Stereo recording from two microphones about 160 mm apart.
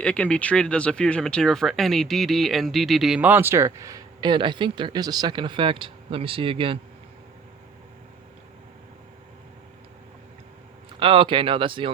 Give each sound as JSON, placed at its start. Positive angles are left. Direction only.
{"t": 0.0, "sound": "speech", "side_deg": 5}
{"t": 11.0, "sound": "speech", "side_deg": -35}